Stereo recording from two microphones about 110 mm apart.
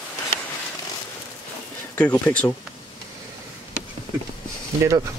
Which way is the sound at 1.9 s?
15° left (ahead or behind).